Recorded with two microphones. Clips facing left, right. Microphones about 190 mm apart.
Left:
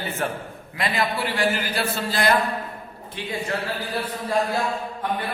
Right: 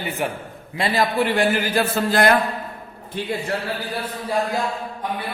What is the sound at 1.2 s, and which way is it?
A man's voice, 50° right (ahead or behind).